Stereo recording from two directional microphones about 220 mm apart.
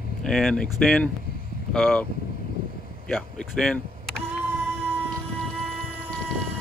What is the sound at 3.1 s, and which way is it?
Speech, centre (ahead or behind).